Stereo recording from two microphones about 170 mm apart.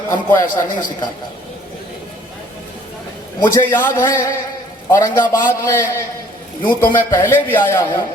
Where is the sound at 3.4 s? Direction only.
10° left (ahead or behind).